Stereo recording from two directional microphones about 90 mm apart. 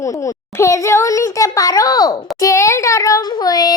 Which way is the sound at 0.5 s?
35° left (ahead or behind).